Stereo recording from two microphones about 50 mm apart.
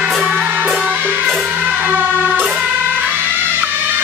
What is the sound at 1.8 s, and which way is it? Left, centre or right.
Music, right.